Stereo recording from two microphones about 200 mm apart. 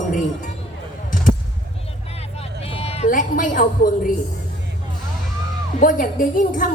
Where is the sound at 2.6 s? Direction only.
30° left (ahead or behind).